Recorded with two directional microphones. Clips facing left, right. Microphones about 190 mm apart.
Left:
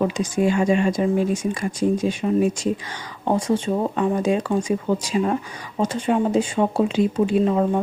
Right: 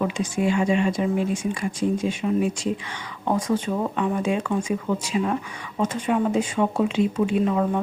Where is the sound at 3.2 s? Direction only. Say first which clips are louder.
Left 3 dB; 30° left (ahead or behind).